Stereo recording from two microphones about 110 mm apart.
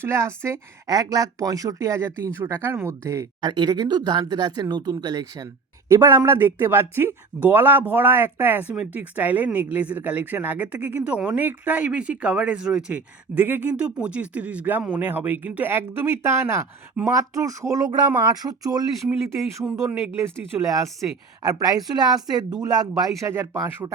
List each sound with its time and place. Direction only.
0.0 s a woman's voice: 25° right (ahead or behind)
3.4 s a woman's voice: 40° right (ahead or behind)
19.9 s a woman's voice: 25° right (ahead or behind)
21.5 s speech: 35° right (ahead or behind)
23.0 s speech: centre (ahead or behind)
23.2 s a woman's voice: 25° right (ahead or behind)